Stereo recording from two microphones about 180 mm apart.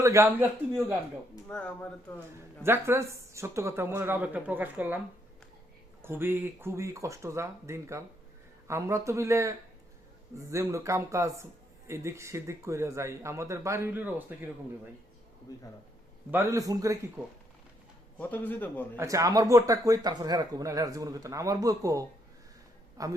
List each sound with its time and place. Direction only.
0.0 s speech: 15° right (ahead or behind)
1.5 s speech: 5° left (ahead or behind)
2.6 s speech: 15° right (ahead or behind)
6.0 s speech: 10° right (ahead or behind)
15.5 s speech: 20° left (ahead or behind)
16.3 s speech: 15° right (ahead or behind)
18.2 s speech: 10° left (ahead or behind)
18.9 s speech: 20° right (ahead or behind)